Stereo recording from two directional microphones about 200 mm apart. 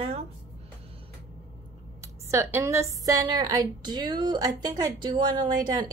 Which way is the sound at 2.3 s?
15° right (ahead or behind).